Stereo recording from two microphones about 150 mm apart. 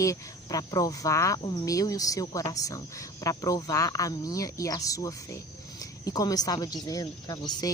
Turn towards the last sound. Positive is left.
turn(degrees=25)  # may be behind; listen again after turning